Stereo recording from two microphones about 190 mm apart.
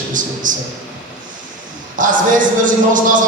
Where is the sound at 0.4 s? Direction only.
45° right (ahead or behind).